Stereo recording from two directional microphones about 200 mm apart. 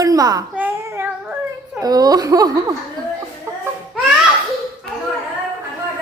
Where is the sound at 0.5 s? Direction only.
10° right (ahead or behind).